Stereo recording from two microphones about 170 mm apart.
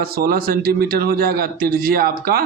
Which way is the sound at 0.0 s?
65° right (ahead or behind).